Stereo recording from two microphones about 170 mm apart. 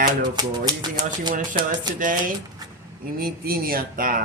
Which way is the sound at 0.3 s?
25° right (ahead or behind).